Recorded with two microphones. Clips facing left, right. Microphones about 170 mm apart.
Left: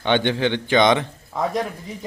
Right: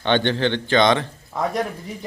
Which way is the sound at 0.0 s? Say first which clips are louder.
Even; 10° left (ahead or behind).